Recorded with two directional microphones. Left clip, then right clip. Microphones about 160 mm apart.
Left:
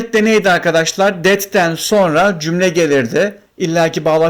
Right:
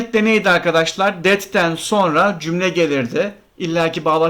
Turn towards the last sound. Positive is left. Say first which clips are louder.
# left 3 dB
turn(degrees=20)  # may be behind; listen again after turning